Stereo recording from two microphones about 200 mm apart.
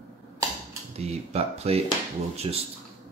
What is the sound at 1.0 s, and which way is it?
Speech, 30° right (ahead or behind).